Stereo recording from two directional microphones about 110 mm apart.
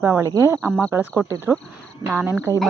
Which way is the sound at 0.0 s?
25° right (ahead or behind).